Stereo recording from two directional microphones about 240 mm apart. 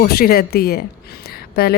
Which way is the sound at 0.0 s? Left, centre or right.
Left.